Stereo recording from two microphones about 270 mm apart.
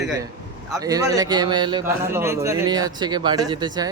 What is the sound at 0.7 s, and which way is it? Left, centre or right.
A man's voice, centre.